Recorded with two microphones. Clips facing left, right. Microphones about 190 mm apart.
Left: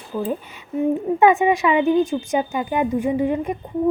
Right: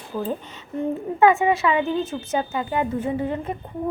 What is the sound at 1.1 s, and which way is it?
Speech, 20° left (ahead or behind).